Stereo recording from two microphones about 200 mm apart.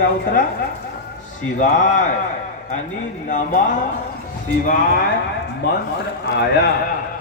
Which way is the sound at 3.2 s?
40° left (ahead or behind).